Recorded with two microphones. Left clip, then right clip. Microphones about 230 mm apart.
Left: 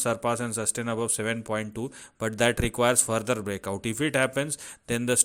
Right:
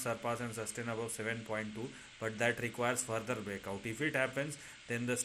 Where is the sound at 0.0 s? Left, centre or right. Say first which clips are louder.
Left 10 dB; left.